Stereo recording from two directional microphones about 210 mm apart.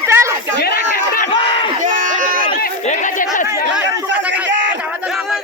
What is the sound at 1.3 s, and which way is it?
Crowd, 25° left (ahead or behind).